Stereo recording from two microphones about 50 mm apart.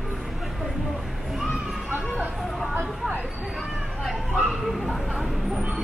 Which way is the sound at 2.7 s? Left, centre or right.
Right.